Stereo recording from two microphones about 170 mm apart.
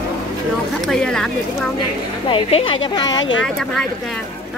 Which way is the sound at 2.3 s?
35° left (ahead or behind).